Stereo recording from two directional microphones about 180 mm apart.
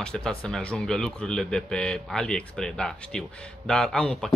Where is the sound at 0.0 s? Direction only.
5° left (ahead or behind).